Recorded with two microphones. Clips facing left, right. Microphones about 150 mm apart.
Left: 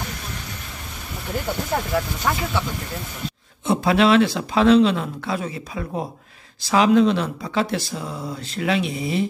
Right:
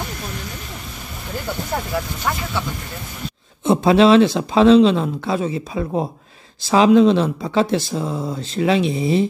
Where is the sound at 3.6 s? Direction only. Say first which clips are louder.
Right 5 dB; 25° right (ahead or behind).